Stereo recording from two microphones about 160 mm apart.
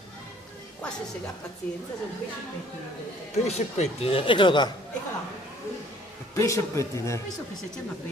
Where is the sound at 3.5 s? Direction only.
45° left (ahead or behind).